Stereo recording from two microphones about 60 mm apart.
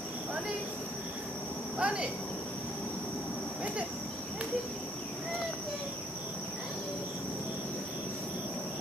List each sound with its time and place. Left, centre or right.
1.8 s speech: centre